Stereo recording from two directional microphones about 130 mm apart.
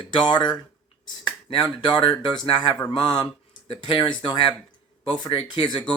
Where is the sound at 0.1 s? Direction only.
35° left (ahead or behind).